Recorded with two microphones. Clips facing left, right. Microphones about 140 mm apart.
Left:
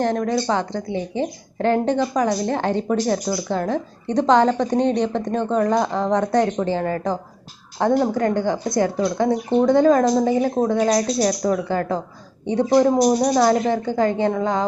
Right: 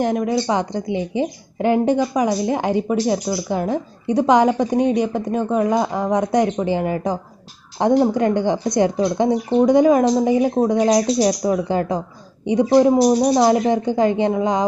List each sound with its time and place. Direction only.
0.0 s speech: 10° right (ahead or behind)
13.2 s speech: 20° right (ahead or behind)